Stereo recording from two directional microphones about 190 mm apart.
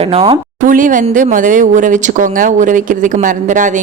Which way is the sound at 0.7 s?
45° right (ahead or behind).